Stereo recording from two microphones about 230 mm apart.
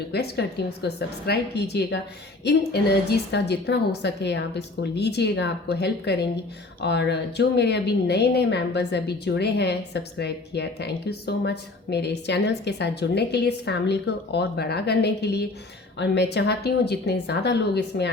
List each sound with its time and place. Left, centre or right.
0.1 s speech: left